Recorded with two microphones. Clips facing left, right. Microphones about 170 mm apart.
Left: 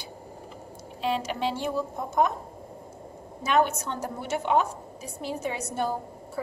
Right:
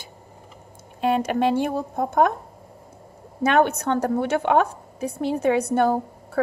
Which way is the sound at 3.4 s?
60° right (ahead or behind).